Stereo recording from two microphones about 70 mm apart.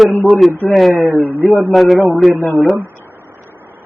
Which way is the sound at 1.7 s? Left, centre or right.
Centre.